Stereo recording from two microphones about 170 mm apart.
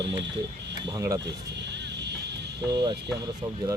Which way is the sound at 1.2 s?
90° right.